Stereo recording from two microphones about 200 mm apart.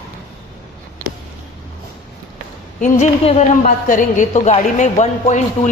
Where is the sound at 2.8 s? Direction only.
40° left (ahead or behind).